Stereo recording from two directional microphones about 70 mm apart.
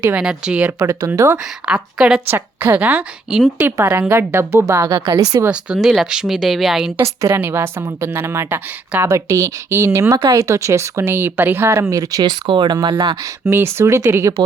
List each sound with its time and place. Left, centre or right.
0.2 s speech: centre
0.8 s speech: right
1.6 s speech: centre
2.3 s a woman's voice: right
3.6 s speech: right
4.9 s speech: right
5.5 s speech: centre
7.0 s speech: right
9.0 s speech: right
11.7 s speech: right
13.4 s speech: right